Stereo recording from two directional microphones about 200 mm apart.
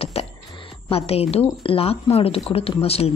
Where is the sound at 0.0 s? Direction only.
30° left (ahead or behind).